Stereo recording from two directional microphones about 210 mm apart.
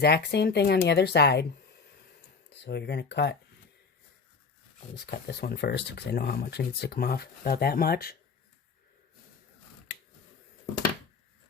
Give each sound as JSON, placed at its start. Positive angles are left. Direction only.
{"t": 0.0, "sound": "speech", "side_deg": 50}
{"t": 2.5, "sound": "speech", "side_deg": 55}
{"t": 4.9, "sound": "speech", "side_deg": 50}